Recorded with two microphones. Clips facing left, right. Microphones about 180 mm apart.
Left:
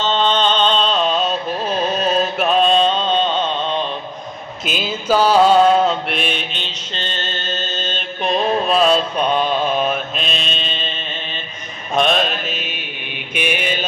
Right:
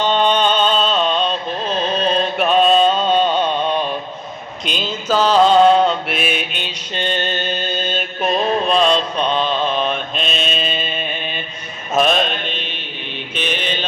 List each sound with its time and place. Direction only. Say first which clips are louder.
0.0 s music: right 2 dB; 15° right (ahead or behind)
4.6 s mantra: left 1 dB; 5° left (ahead or behind)